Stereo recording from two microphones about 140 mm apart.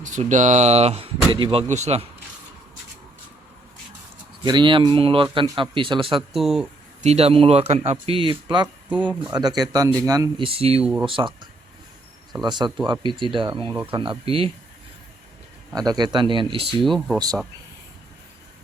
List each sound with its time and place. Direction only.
0.0 s speech: 60° right (ahead or behind); by 1.6 s 40° right (ahead or behind)
1.7 s speech: 50° right (ahead or behind)
4.4 s a man's voice: 35° right (ahead or behind)
6.3 s speech: centre (ahead or behind)
7.0 s a man's voice: 50° right (ahead or behind); by 8.7 s 35° right (ahead or behind)
9.0 s speech: 10° left (ahead or behind)
9.3 s a man's voice: 30° right (ahead or behind)
10.4 s a man's voice: 45° right (ahead or behind)
12.5 s a man's voice: 30° right (ahead or behind)
15.9 s a man's voice: 30° right (ahead or behind)
16.8 s speech: centre (ahead or behind)